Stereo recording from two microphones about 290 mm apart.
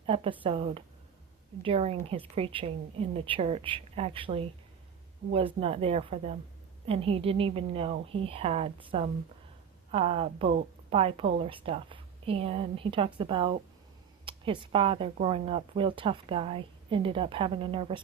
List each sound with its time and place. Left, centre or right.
0.0 s a woman's voice: centre
5.5 s speech: centre